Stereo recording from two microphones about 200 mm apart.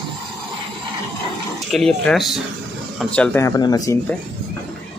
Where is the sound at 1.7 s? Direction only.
Centre (ahead or behind); by 3.9 s 20° left (ahead or behind).